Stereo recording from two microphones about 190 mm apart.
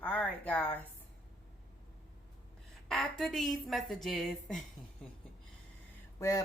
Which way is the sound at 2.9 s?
5° left (ahead or behind).